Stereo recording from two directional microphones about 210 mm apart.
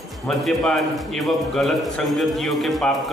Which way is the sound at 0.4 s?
Centre (ahead or behind).